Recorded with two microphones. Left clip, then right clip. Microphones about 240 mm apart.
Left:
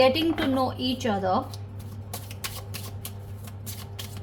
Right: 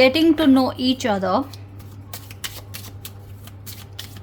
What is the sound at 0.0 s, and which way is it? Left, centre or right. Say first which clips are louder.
Speech: right 6 dB; right.